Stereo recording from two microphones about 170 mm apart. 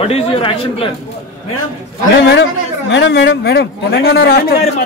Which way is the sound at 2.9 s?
90° left.